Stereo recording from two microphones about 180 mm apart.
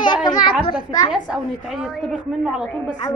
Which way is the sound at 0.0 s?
25° left (ahead or behind).